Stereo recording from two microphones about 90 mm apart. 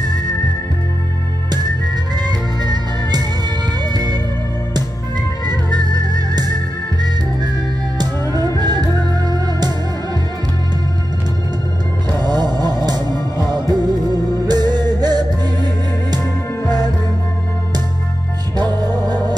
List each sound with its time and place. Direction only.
2.1 s music: 50° right (ahead or behind)
5.5 s music: 50° right (ahead or behind)
12.2 s music: 50° right (ahead or behind)
18.6 s music: 50° right (ahead or behind)